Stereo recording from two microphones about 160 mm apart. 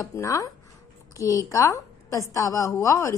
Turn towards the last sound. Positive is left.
turn(degrees=20)  # may be behind; listen again after turning